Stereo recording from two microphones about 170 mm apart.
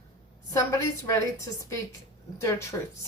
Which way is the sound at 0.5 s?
20° left (ahead or behind).